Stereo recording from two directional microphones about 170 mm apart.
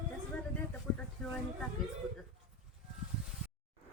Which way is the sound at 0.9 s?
5° left (ahead or behind).